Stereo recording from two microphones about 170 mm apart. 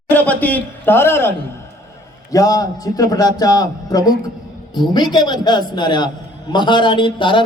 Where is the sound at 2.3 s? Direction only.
20° left (ahead or behind).